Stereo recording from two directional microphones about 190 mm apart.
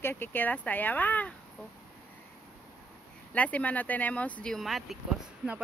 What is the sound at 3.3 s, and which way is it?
Speech, 5° left (ahead or behind).